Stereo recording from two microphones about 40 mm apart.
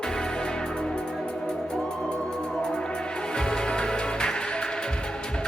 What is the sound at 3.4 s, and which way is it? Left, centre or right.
Music, centre.